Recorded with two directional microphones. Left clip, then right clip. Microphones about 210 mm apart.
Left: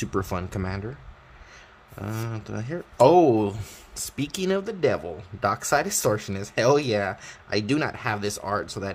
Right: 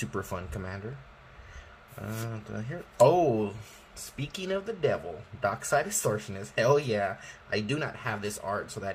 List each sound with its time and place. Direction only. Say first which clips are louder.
0.0 s speech: left 7 dB; 40° left (ahead or behind)
2.0 s speech: left 5 dB; 45° left (ahead or behind)
4.2 s speech: left 7 dB; 55° left (ahead or behind)